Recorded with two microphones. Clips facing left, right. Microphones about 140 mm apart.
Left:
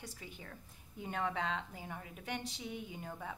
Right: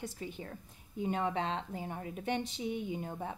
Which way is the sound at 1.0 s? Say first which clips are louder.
Right 5 dB; 20° right (ahead or behind).